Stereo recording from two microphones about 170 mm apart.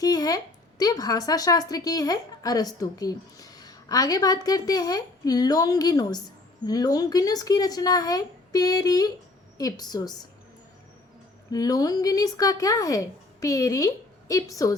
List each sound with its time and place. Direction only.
0.0 s speech: 20° left (ahead or behind)
11.5 s speech: 20° left (ahead or behind)